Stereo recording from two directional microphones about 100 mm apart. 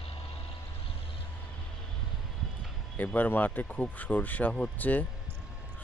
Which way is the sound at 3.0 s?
15° left (ahead or behind).